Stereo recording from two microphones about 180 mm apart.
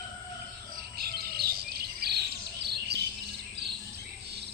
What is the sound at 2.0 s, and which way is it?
Bird, 60° right (ahead or behind).